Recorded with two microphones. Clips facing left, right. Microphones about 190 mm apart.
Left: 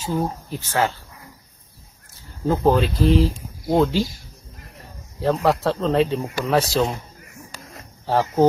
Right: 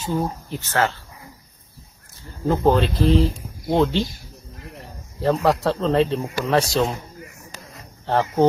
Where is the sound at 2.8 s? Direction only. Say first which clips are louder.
Even; 30° right (ahead or behind).